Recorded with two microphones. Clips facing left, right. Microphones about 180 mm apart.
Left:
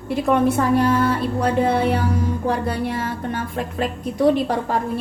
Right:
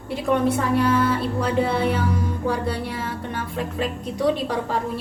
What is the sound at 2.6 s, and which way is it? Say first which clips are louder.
A woman's voice: left 3 dB; 50° left (ahead or behind).